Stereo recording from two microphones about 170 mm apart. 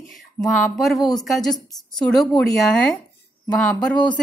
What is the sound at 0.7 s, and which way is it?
Speech, centre (ahead or behind).